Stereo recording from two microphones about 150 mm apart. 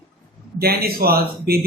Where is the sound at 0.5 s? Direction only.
90° right.